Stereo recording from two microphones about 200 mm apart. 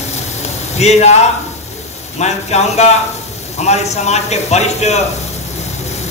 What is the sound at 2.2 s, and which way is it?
A man's voice, 35° left (ahead or behind).